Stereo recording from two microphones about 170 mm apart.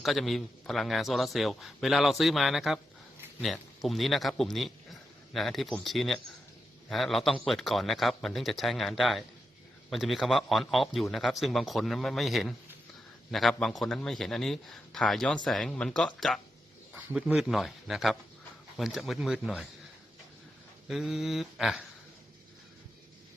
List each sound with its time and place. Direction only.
0.0 s a man's voice: centre (ahead or behind)
3.8 s a man's voice: centre (ahead or behind)
16.9 s speech: 15° right (ahead or behind)
17.2 s a man's voice: centre (ahead or behind)
20.8 s a man's voice: centre (ahead or behind)